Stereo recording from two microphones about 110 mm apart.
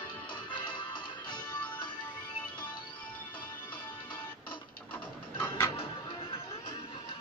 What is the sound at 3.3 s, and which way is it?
Music, 50° left (ahead or behind).